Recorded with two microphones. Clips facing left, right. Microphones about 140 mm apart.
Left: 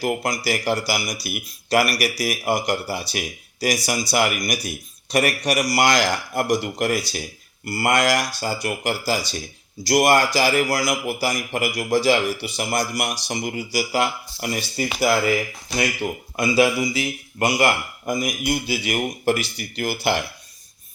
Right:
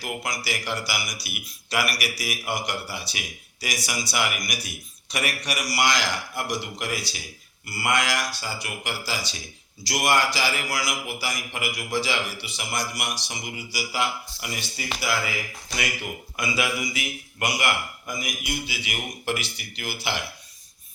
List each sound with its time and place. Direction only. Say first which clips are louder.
0.0 s a man's voice: left 8 dB; 45° left (ahead or behind)
16.4 s speech: left 9 dB; 35° left (ahead or behind)
18.0 s a man's voice: left 9 dB; 40° left (ahead or behind)